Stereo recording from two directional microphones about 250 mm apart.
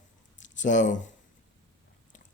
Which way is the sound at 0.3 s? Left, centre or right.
Left.